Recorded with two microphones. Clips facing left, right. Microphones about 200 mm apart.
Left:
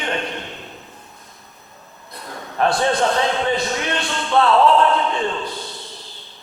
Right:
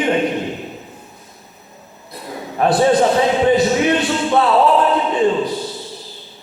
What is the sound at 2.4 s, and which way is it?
A man's voice, 15° right (ahead or behind).